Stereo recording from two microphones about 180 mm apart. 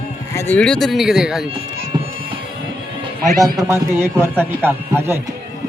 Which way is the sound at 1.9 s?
25° right (ahead or behind).